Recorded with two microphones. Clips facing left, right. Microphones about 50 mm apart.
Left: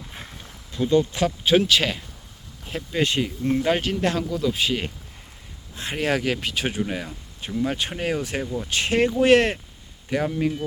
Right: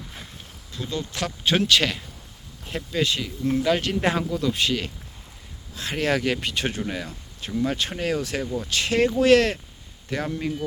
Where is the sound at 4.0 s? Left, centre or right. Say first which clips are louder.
Even; centre.